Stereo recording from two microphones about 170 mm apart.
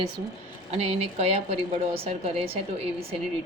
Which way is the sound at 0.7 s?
35° right (ahead or behind).